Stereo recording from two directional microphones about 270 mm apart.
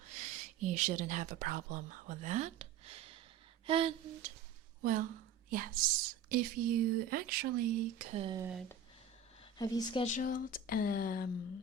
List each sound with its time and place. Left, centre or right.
0.2 s speech: right
3.7 s a sound: right
4.8 s speech: right
9.4 s speech: centre; by 11.3 s left